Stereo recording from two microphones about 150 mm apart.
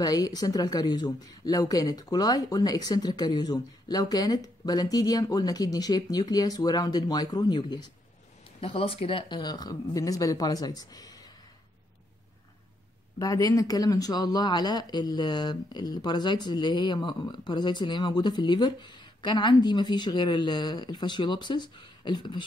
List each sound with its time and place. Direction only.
0.0 s speech: 25° left (ahead or behind)
13.2 s speech: 25° left (ahead or behind)